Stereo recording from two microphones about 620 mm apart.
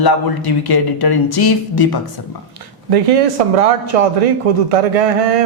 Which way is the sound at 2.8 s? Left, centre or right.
Right.